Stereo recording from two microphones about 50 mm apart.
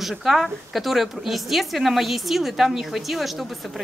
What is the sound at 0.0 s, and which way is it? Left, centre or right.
Speech, centre.